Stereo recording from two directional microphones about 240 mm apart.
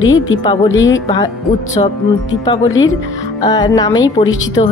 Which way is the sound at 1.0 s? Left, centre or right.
Centre.